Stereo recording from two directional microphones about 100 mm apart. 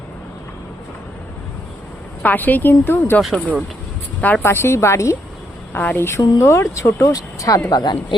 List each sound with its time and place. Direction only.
2.2 s speech: 15° left (ahead or behind)
3.2 s speech: centre (ahead or behind)
4.2 s speech: 20° left (ahead or behind)
5.7 s speech: 20° left (ahead or behind); by 7.9 s 45° left (ahead or behind)